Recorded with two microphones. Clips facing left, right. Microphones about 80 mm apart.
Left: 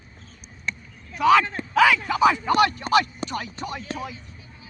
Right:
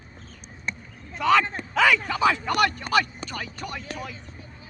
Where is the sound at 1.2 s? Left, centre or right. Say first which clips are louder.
Left 3 dB; centre.